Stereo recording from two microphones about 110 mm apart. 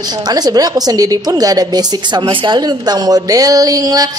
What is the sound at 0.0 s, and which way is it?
A woman's voice, 40° right (ahead or behind).